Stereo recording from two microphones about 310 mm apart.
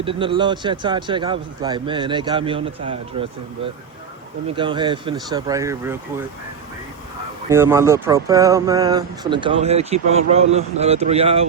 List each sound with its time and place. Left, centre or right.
0.0 s speech: centre
4.5 s speech: centre
7.5 s speech: centre